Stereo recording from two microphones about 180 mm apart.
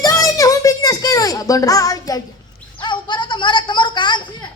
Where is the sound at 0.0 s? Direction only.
20° left (ahead or behind).